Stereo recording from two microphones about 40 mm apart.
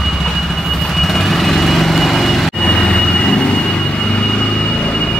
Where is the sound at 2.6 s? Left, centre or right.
Centre.